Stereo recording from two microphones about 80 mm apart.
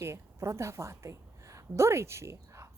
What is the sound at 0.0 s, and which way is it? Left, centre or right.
Speech, right.